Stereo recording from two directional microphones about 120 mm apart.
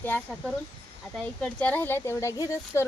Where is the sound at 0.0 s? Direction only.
10° left (ahead or behind).